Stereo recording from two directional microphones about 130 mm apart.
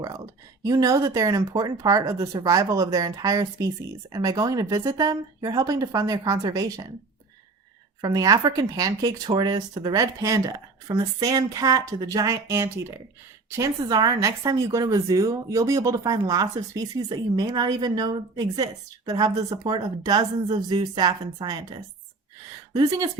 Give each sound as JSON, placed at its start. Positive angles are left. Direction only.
{"t": 0.6, "sound": "speech", "side_deg": -25}
{"t": 8.0, "sound": "speech", "side_deg": -30}
{"t": 13.6, "sound": "a woman's voice", "side_deg": -30}